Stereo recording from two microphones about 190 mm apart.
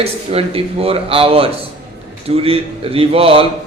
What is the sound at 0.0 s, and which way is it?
Speech, 30° right (ahead or behind).